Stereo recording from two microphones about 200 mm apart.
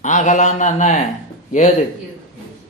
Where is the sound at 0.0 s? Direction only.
35° left (ahead or behind).